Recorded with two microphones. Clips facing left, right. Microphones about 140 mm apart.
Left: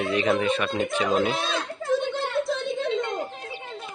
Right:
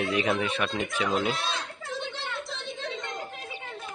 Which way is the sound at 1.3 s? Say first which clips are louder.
Left 5 dB; 50° left (ahead or behind).